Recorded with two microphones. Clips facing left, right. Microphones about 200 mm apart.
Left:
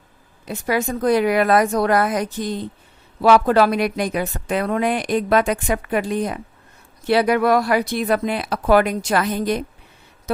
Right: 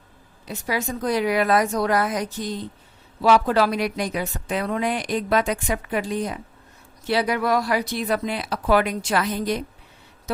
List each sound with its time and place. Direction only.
0.4 s a woman's voice: 55° left (ahead or behind)